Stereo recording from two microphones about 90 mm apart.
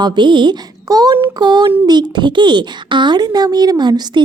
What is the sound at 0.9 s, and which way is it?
A woman's voice, 45° right (ahead or behind).